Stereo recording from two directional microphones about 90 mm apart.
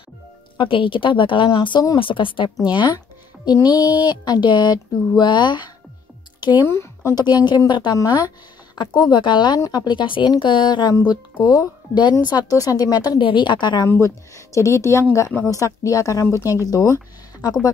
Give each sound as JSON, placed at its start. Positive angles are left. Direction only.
{"t": 0.6, "sound": "a woman's voice", "side_deg": 75}
{"t": 2.7, "sound": "speech", "side_deg": 60}
{"t": 3.5, "sound": "speech", "side_deg": 50}
{"t": 6.6, "sound": "speech", "side_deg": 30}
{"t": 7.2, "sound": "speech", "side_deg": 50}
{"t": 9.1, "sound": "speech", "side_deg": 60}
{"t": 13.2, "sound": "speech", "side_deg": 65}
{"t": 13.8, "sound": "speech", "side_deg": 30}